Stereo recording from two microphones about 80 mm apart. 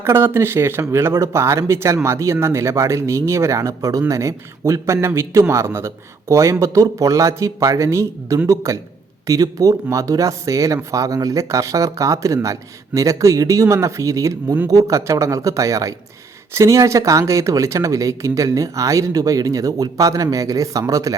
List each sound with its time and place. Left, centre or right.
0.0 s a man's voice: right